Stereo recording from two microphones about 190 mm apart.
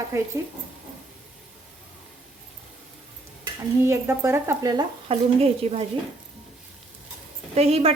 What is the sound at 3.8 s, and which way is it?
A woman's voice, 15° right (ahead or behind).